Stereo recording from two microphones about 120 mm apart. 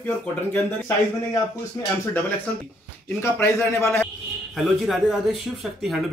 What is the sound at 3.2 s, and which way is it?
Speech, 20° left (ahead or behind).